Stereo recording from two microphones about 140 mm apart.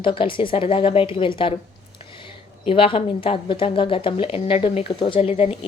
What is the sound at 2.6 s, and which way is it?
Speech, 40° left (ahead or behind).